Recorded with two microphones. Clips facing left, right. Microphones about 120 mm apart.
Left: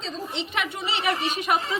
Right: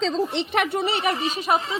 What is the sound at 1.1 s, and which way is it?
Speech, 30° right (ahead or behind).